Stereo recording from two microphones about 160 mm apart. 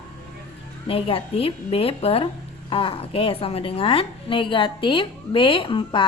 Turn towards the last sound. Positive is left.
turn(degrees=30)  # may be behind; listen again after turning